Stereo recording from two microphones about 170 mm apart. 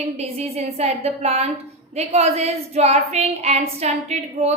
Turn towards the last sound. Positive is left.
turn(degrees=-40)  # may be behind; listen again after turning